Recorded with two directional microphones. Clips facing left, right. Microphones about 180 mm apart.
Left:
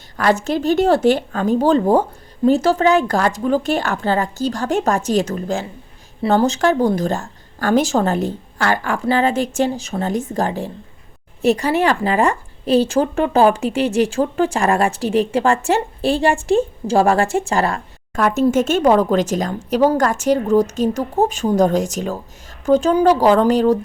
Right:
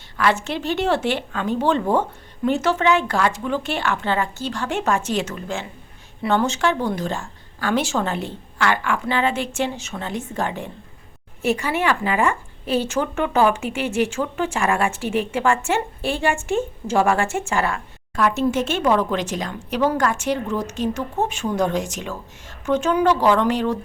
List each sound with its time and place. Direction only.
0.2 s a woman's voice: 40° left (ahead or behind)